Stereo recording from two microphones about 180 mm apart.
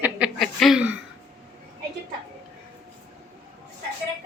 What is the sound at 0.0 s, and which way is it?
Chuckle, 5° right (ahead or behind).